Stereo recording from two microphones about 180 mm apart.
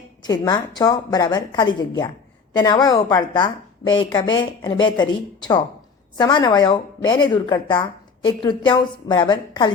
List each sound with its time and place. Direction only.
0.3 s a woman's voice: 20° left (ahead or behind)